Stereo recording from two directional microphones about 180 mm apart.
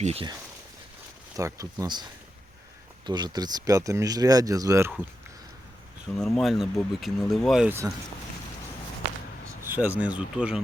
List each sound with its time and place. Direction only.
0.0 s speech: 35° right (ahead or behind)
1.4 s speech: 15° right (ahead or behind)
3.1 s speech: 25° right (ahead or behind)
6.2 s speech: centre (ahead or behind)
9.5 s speech: 10° right (ahead or behind)